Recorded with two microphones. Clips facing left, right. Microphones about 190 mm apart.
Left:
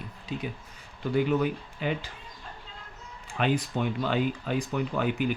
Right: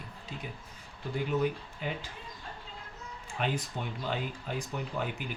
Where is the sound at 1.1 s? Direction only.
85° left.